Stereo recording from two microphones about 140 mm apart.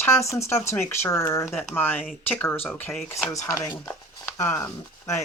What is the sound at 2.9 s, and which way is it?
Speech, centre (ahead or behind).